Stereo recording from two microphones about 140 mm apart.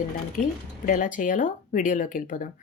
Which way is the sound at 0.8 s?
65° left (ahead or behind).